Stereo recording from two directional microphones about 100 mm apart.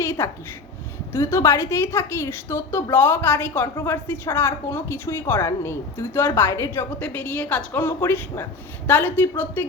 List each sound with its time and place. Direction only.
0.0 s a woman's voice: 25° left (ahead or behind)
7.0 s a woman's voice: 15° left (ahead or behind)